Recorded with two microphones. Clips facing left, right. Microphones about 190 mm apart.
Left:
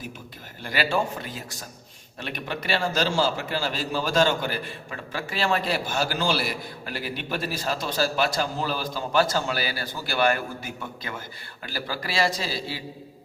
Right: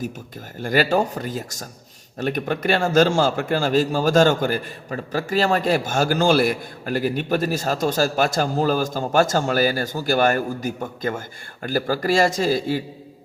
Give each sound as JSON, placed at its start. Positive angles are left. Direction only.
{"t": 0.6, "sound": "a man's voice", "side_deg": -45}